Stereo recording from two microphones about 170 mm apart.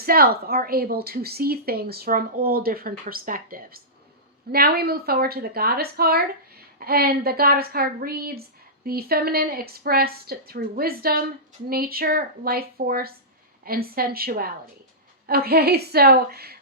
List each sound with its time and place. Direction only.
0.0 s a woman's voice: 60° right (ahead or behind)